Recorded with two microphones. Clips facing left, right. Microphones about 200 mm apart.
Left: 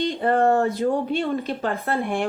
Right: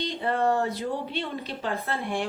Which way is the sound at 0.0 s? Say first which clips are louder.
Left 6 dB; 50° left (ahead or behind).